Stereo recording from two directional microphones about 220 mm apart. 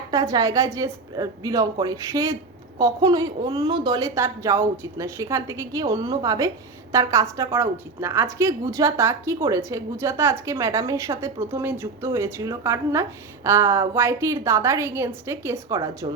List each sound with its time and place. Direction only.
0.1 s a woman's voice: 15° right (ahead or behind)